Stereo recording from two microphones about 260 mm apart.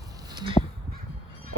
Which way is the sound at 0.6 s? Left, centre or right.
Centre.